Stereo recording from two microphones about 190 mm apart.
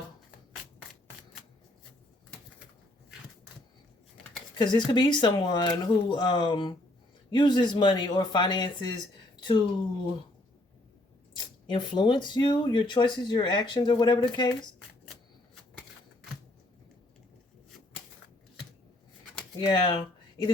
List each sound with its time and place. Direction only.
4.5 s speech: 25° left (ahead or behind)
11.3 s speech: 25° left (ahead or behind)
19.5 s speech: 25° left (ahead or behind)